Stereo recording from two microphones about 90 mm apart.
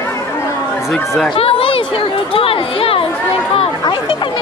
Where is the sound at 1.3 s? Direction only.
90° left.